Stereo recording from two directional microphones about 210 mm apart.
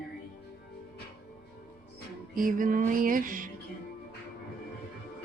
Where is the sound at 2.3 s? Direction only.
40° right (ahead or behind).